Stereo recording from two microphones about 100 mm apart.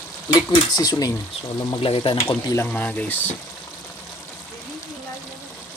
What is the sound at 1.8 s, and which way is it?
Speech, 60° left (ahead or behind).